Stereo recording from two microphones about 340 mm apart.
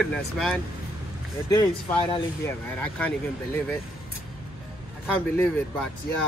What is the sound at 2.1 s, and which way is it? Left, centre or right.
Speech, centre.